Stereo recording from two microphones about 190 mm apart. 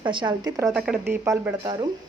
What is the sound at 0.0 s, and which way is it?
Speech, 25° right (ahead or behind).